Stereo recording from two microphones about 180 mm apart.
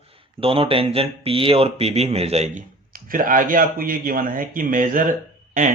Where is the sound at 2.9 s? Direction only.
50° right (ahead or behind).